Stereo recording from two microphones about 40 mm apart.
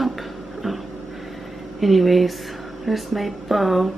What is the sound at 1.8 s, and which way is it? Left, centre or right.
Speech, centre.